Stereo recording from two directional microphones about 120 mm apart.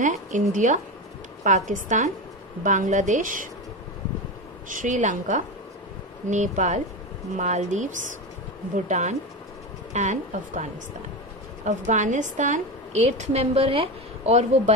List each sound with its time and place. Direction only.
0.0 s a woman's voice: 90° right
4.6 s a woman's voice: 90° right
7.3 s a woman's voice: 80° right; by 14.4 s 55° right (ahead or behind)